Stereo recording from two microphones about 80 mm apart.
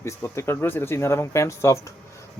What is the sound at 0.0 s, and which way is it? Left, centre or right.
Speech, left.